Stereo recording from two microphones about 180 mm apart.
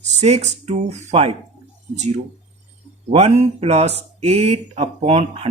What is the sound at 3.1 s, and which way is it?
Speech, 35° right (ahead or behind).